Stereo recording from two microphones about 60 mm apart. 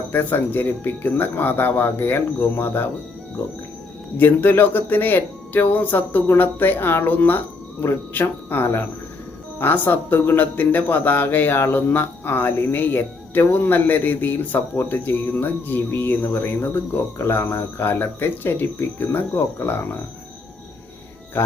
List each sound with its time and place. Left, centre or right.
0.1 s speech: left
4.2 s speech: left